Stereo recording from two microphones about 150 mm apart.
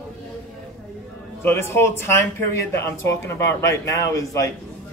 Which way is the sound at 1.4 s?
15° left (ahead or behind).